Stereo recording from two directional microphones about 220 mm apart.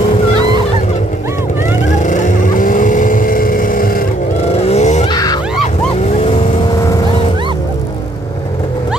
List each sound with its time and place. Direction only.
1.9 s vehicle: 35° left (ahead or behind)
4.5 s vehicle: 30° left (ahead or behind)
5.0 s a sound: 15° left (ahead or behind)
6.1 s vehicle: 25° left (ahead or behind)